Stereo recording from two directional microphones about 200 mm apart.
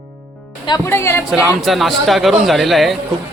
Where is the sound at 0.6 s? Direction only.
15° left (ahead or behind).